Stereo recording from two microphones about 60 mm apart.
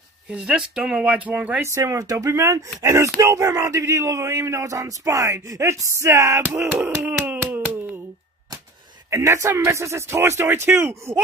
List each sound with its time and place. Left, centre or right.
0.3 s speech: centre
1.6 s speech: right
7.5 s a sound: right
9.1 s speech: right